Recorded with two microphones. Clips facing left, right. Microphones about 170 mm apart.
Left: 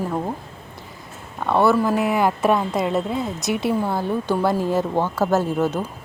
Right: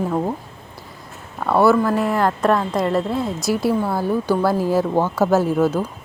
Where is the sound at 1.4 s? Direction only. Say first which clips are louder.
Right 2 dB; 5° right (ahead or behind).